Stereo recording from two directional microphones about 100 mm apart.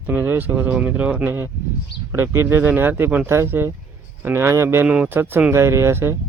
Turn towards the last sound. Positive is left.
turn(degrees=-25)  # may be behind; listen again after turning